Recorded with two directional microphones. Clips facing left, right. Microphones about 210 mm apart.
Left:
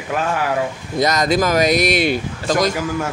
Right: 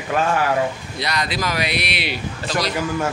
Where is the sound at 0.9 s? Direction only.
45° left (ahead or behind).